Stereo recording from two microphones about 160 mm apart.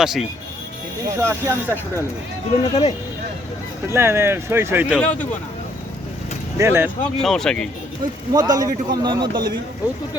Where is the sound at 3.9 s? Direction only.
15° right (ahead or behind).